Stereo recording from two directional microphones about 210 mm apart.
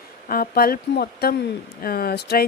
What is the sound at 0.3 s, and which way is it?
A woman's voice, 45° left (ahead or behind).